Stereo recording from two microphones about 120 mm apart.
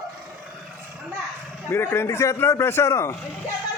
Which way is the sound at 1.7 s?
20° left (ahead or behind).